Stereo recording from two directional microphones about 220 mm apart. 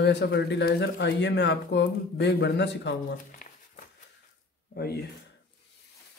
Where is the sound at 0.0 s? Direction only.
50° left (ahead or behind).